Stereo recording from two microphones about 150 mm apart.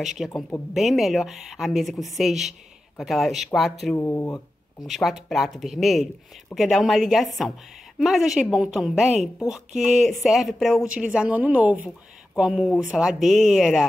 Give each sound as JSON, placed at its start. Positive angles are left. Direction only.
{"t": 0.0, "sound": "speech", "side_deg": 0}
{"t": 3.9, "sound": "speech", "side_deg": 15}
{"t": 4.8, "sound": "a woman's voice", "side_deg": 0}